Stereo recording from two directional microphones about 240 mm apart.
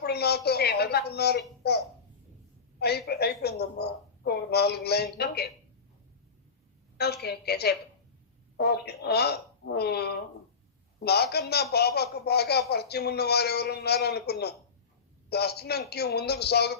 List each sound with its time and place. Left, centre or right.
0.0 s a woman's voice: left
6.9 s a man's voice: left